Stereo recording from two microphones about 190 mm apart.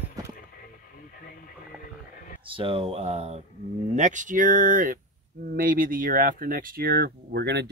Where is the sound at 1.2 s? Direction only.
50° left (ahead or behind).